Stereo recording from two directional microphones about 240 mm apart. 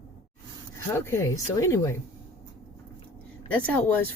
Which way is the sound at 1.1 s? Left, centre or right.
Centre.